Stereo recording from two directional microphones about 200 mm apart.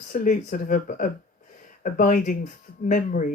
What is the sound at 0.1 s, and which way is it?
Speech, 45° left (ahead or behind).